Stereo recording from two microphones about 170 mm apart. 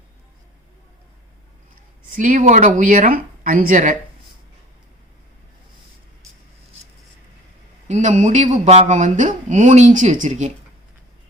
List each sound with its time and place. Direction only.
2.0 s speech: 50° right (ahead or behind)
7.9 s speech: 45° right (ahead or behind)